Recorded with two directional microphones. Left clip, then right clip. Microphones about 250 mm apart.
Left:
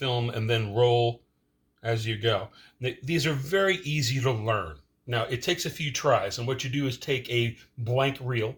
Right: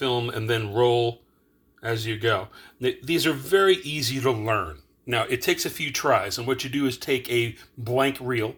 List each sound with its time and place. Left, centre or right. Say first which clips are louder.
0.0 s speech: right 4 dB; right